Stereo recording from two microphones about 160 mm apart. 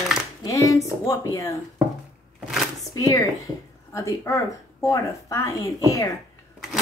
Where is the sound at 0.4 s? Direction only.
20° left (ahead or behind).